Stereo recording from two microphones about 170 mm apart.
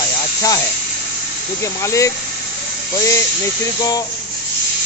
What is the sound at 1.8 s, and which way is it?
Speech, 20° left (ahead or behind).